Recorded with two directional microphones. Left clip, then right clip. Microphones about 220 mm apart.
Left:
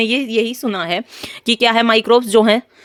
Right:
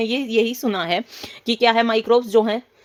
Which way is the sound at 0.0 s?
30° left (ahead or behind).